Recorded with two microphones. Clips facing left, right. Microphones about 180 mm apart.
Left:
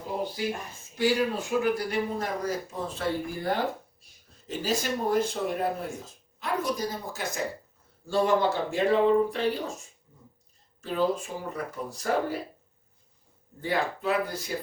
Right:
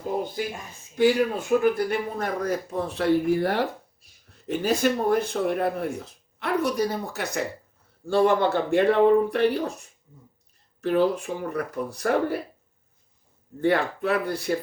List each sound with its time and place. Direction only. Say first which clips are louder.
0.9 s speech: right 5 dB; 55° right (ahead or behind); by 3.6 s 70° right (ahead or behind)
4.4 s speech: right 6 dB; 60° right (ahead or behind)
13.6 s speech: right 6 dB; 60° right (ahead or behind)